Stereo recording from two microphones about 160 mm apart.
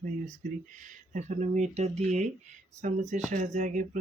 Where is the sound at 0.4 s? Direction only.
55° right (ahead or behind).